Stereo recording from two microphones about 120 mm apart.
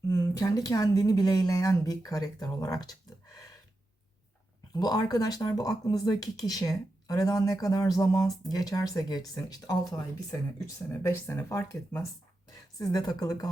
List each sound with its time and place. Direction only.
0.1 s speech: 25° left (ahead or behind)
4.7 s speech: 35° left (ahead or behind)